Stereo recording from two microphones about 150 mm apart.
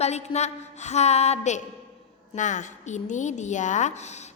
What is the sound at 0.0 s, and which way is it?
A woman's voice, 45° left (ahead or behind).